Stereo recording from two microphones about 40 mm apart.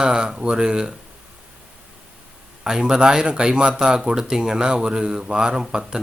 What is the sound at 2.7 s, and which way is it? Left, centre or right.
Speech, centre.